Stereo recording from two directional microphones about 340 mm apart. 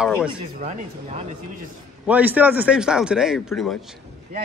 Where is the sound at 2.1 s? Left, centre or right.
Centre.